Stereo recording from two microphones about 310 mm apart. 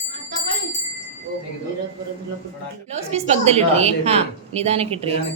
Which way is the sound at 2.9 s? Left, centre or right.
Centre.